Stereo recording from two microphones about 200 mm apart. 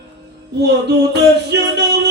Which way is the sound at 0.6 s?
55° right (ahead or behind).